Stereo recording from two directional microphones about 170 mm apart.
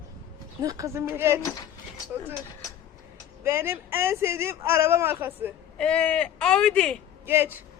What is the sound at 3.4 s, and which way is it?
Speech, 15° right (ahead or behind).